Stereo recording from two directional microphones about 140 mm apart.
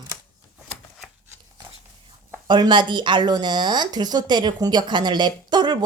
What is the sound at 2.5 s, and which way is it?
A woman's voice, 35° right (ahead or behind).